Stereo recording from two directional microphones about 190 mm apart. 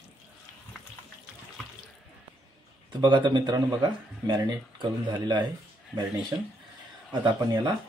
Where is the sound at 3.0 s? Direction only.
25° right (ahead or behind).